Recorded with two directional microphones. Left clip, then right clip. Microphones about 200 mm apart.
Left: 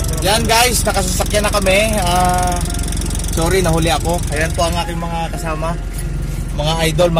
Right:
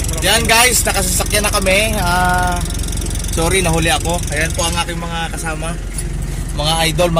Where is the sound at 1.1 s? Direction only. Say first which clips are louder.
Even; 15° left (ahead or behind).